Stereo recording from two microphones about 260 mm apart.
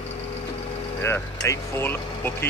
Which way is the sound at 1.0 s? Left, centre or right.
Centre.